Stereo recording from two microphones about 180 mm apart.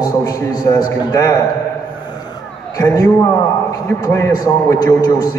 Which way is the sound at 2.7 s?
20° left (ahead or behind).